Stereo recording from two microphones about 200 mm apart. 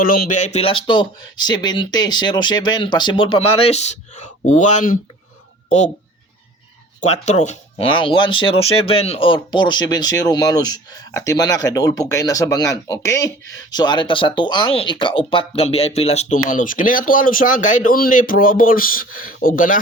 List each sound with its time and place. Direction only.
0.0 s speech: 45° left (ahead or behind)
7.0 s speech: 35° left (ahead or behind)